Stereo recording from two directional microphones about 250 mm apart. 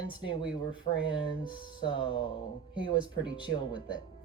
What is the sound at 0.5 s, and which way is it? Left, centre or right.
Speech, centre.